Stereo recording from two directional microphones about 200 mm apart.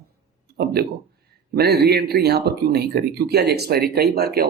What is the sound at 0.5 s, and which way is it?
Speech, 50° right (ahead or behind).